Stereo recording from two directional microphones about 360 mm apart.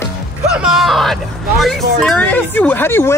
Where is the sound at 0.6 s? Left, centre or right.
Centre.